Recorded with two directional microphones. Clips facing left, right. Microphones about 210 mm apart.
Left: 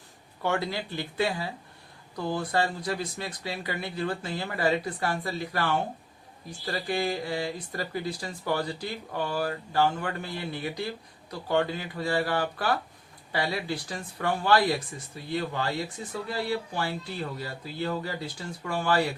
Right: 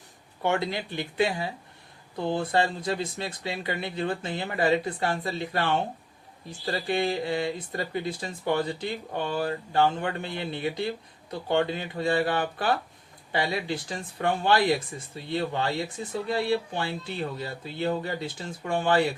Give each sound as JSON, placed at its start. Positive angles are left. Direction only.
{"t": 0.4, "sound": "speech", "side_deg": -20}